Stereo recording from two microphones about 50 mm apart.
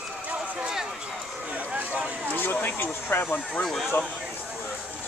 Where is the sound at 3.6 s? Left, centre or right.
Centre.